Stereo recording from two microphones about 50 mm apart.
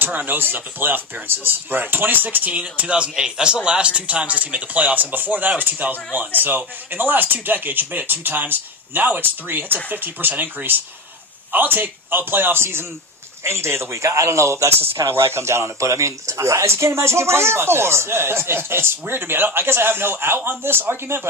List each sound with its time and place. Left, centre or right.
0.0 s a man's voice: right
13.4 s a man's voice: right